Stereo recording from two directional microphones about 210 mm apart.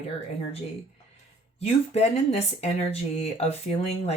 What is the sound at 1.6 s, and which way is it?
Speech, 30° left (ahead or behind).